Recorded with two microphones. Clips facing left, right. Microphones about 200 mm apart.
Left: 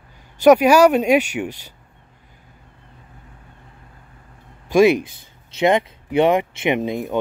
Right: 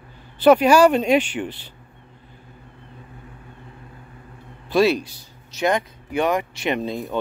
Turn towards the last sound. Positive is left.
turn(degrees=15)  # may be behind; listen again after turning